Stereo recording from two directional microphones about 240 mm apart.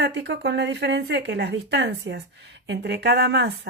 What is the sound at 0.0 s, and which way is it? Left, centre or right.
A woman's voice, right.